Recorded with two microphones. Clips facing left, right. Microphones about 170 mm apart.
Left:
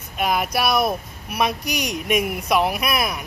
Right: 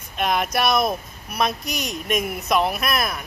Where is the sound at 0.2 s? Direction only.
5° left (ahead or behind).